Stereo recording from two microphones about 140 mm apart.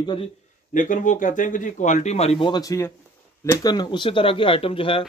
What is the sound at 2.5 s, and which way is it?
A man's voice, 25° left (ahead or behind).